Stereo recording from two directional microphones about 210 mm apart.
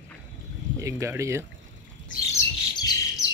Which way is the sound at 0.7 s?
15° right (ahead or behind).